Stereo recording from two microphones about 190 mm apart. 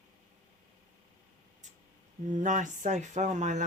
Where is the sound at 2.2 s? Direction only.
40° right (ahead or behind).